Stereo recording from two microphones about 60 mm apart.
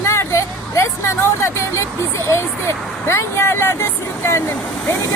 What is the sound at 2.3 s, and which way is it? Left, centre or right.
Speech, left.